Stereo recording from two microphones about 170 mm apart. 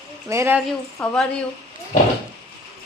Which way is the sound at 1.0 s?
5° left (ahead or behind).